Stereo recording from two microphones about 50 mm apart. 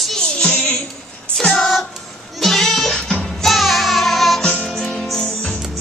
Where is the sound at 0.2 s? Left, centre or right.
Centre.